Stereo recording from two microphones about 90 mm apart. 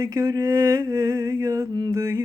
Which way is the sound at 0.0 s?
40° right (ahead or behind).